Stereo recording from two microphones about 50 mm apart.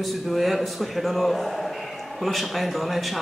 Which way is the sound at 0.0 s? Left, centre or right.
Centre.